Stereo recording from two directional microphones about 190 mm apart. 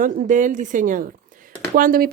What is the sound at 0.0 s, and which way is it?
Speech, 40° right (ahead or behind).